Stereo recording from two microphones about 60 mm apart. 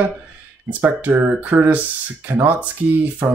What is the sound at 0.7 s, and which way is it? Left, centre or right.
Speech, right.